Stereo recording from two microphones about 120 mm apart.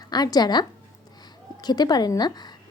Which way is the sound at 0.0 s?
35° left (ahead or behind).